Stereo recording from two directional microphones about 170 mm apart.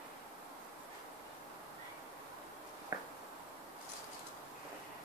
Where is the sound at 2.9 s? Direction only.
15° right (ahead or behind).